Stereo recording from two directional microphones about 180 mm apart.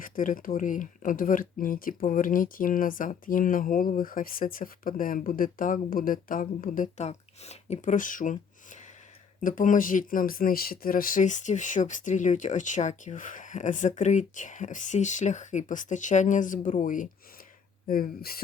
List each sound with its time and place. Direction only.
0.0 s speech: 50° left (ahead or behind)